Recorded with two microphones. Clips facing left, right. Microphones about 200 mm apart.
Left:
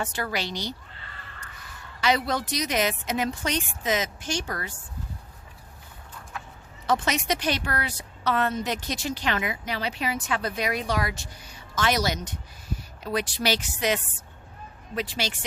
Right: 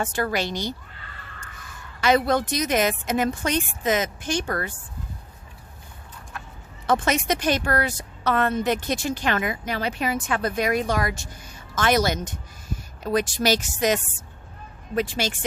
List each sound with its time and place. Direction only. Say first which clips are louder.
0.0 s a woman's voice: right 5 dB; 50° right (ahead or behind)
6.8 s a woman's voice: right 3 dB; 50° right (ahead or behind)